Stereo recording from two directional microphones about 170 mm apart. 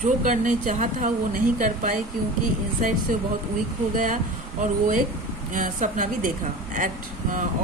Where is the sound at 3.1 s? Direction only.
55° right (ahead or behind).